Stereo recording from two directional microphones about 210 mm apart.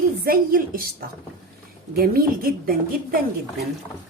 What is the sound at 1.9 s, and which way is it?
Speech, 45° right (ahead or behind).